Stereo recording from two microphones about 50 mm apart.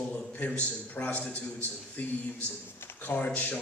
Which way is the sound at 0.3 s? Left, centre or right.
Left.